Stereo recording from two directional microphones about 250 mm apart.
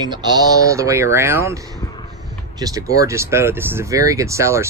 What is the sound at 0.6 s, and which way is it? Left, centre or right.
Speech, centre.